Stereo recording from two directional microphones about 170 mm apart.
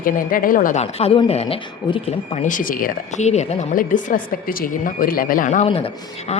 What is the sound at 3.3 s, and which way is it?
A woman's voice, 40° left (ahead or behind).